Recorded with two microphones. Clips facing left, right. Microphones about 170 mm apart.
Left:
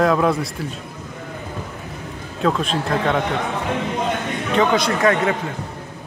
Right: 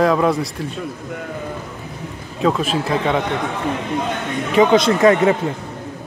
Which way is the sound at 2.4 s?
5° right (ahead or behind).